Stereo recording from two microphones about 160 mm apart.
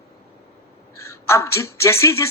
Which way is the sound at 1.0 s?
15° left (ahead or behind).